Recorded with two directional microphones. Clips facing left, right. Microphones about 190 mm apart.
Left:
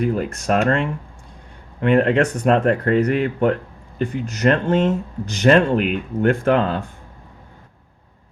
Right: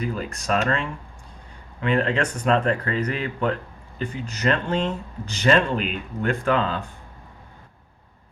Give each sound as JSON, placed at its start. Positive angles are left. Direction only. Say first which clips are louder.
{"t": 0.0, "sound": "speech", "louder": "left 7 dB", "side_deg": 55}